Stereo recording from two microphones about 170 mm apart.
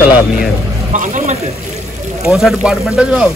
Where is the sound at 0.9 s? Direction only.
50° right (ahead or behind).